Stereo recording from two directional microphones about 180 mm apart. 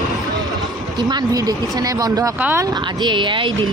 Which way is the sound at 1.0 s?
25° right (ahead or behind).